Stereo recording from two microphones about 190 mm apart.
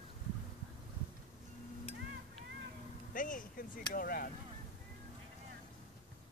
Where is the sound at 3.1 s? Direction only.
45° left (ahead or behind).